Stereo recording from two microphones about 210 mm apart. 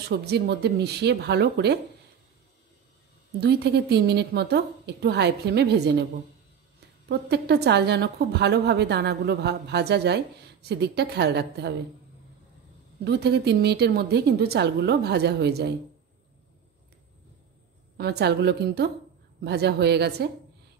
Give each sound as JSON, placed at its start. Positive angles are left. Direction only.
{"t": 0.1, "sound": "a woman's voice", "side_deg": -50}
{"t": 3.3, "sound": "a woman's voice", "side_deg": -50}
{"t": 7.1, "sound": "a woman's voice", "side_deg": -50}
{"t": 13.0, "sound": "a woman's voice", "side_deg": -50}
{"t": 17.9, "sound": "a woman's voice", "side_deg": -50}